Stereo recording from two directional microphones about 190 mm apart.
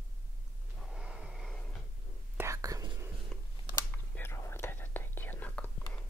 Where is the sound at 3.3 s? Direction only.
Centre (ahead or behind).